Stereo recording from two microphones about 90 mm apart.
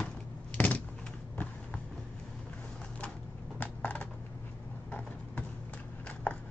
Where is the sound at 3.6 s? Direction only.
15° left (ahead or behind).